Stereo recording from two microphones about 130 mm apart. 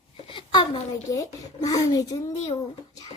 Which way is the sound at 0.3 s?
40° left (ahead or behind).